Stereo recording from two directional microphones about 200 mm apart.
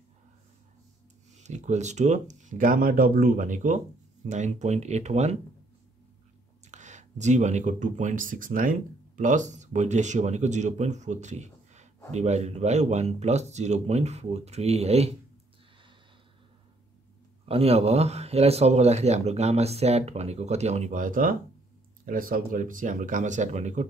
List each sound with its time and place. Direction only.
1.4 s speech: 35° right (ahead or behind)
6.6 s speech: 35° right (ahead or behind)
17.5 s speech: 30° right (ahead or behind)